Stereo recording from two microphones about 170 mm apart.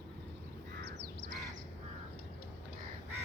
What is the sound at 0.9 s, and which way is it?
Crow, 75° right (ahead or behind).